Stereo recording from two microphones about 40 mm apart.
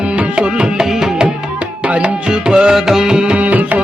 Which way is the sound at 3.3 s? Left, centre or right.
Right.